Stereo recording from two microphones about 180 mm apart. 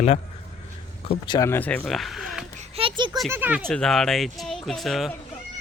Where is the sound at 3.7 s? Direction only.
5° left (ahead or behind).